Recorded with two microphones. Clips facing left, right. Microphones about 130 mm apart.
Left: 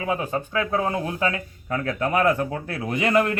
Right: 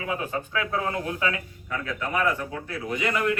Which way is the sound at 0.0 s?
30° left (ahead or behind).